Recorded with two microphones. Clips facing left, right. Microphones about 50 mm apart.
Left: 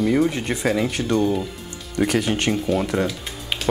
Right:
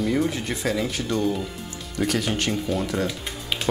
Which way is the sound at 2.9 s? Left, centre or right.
Centre.